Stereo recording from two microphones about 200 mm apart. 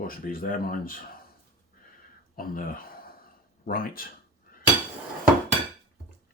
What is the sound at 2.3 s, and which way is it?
Speech, 45° left (ahead or behind).